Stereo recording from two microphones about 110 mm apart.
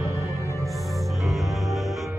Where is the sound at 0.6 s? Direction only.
Centre (ahead or behind).